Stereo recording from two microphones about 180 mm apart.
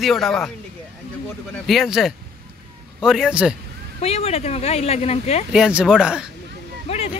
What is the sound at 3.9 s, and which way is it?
Speech, 35° left (ahead or behind).